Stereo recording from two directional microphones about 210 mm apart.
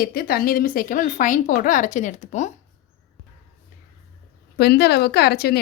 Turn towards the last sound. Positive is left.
turn(degrees=50)  # may be behind; listen again after turning